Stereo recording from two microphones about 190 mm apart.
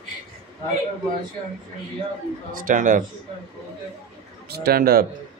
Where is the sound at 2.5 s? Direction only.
45° right (ahead or behind).